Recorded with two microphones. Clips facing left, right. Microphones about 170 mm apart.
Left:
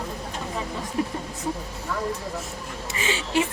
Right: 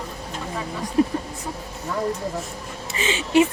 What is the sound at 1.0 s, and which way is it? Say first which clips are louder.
Speech: right 8 dB; 25° right (ahead or behind).